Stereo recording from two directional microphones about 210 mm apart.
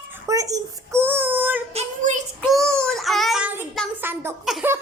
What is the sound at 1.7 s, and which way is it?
Child singing, 35° right (ahead or behind).